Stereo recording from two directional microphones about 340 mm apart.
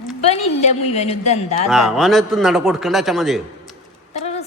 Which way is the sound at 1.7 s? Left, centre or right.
Centre.